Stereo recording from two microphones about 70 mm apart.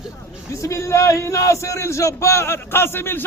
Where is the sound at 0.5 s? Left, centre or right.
Left.